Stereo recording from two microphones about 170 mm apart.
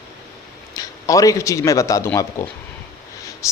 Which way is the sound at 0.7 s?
20° left (ahead or behind).